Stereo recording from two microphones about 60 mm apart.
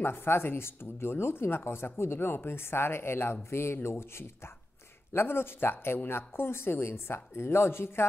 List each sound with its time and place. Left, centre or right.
0.0 s speech: left